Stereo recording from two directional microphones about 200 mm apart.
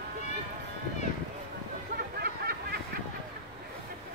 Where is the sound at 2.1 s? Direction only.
50° right (ahead or behind).